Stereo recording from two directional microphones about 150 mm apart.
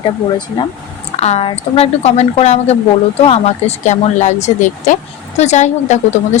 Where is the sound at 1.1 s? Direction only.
45° left (ahead or behind).